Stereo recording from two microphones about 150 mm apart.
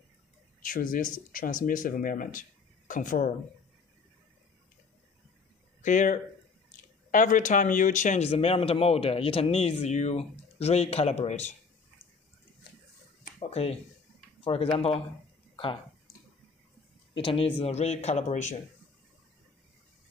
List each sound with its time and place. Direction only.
0.6 s speech: 65° left (ahead or behind)
5.8 s speech: 55° left (ahead or behind)
13.4 s speech: 40° left (ahead or behind)
15.5 s a sound: 35° left (ahead or behind)
17.1 s speech: 35° left (ahead or behind)